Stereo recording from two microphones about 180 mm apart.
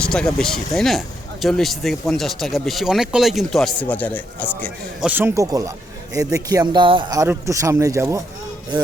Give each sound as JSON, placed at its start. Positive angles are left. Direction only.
{"t": 0.0, "sound": "speech", "side_deg": 5}
{"t": 4.9, "sound": "speech", "side_deg": -10}